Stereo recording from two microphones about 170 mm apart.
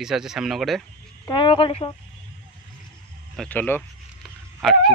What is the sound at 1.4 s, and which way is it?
Speech, 30° left (ahead or behind).